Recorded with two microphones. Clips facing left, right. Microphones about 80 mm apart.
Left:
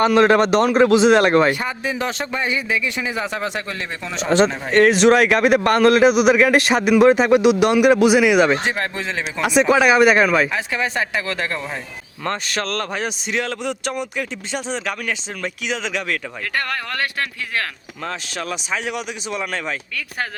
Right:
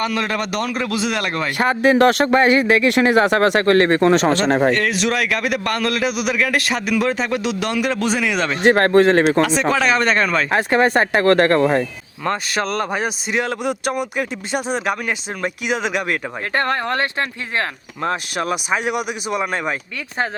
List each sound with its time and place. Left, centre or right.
0.0 s a man's voice: left
1.5 s a man's voice: right
4.7 s a man's voice: left
8.6 s a man's voice: right
9.6 s speech: centre
10.5 s speech: right
12.2 s speech: centre
15.4 s speech: centre
16.6 s speech: right
18.7 s speech: centre